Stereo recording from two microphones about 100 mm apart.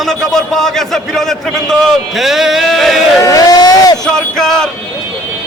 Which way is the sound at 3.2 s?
40° left (ahead or behind).